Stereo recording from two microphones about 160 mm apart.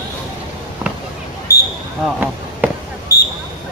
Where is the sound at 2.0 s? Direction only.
10° right (ahead or behind).